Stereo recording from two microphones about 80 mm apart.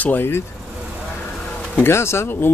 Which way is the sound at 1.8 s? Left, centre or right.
Left.